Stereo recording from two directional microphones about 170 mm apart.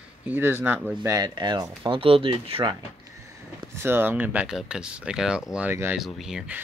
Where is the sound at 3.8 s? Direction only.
10° right (ahead or behind).